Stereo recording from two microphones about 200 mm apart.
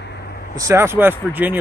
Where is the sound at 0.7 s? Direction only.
10° right (ahead or behind).